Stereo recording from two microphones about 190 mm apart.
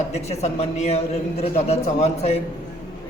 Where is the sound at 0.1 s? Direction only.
35° left (ahead or behind).